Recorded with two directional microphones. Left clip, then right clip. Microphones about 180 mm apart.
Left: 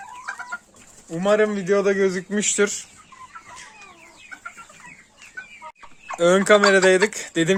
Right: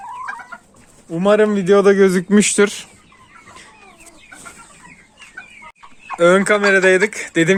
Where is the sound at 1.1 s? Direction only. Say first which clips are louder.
Right 5 dB; 30° right (ahead or behind); by 2.9 s 55° right (ahead or behind).